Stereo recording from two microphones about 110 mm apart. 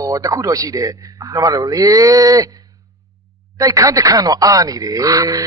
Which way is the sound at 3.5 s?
30° right (ahead or behind).